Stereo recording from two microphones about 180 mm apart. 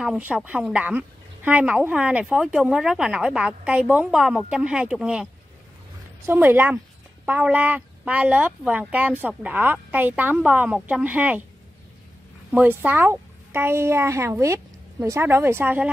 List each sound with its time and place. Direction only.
0.0 s a woman's voice: 5° right (ahead or behind)
12.5 s speech: 10° right (ahead or behind)